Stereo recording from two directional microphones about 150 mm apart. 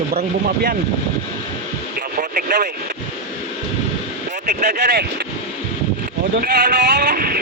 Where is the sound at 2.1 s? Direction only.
70° right (ahead or behind).